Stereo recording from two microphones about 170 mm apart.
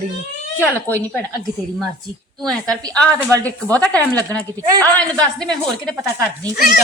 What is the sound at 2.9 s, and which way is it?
A woman's voice, 10° left (ahead or behind).